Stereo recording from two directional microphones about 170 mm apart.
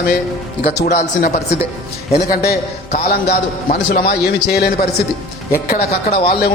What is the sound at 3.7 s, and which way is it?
Speech, 55° left (ahead or behind).